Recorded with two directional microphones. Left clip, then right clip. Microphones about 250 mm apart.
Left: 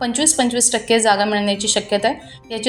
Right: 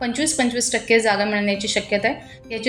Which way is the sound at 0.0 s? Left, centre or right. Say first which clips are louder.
Left 3 dB; centre.